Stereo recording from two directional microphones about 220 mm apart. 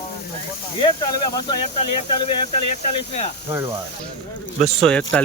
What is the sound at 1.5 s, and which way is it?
Speech, 25° left (ahead or behind).